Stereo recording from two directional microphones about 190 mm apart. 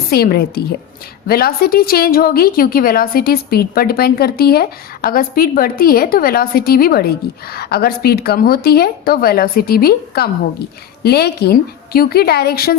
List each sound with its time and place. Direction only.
0.1 s a woman's voice: 55° left (ahead or behind)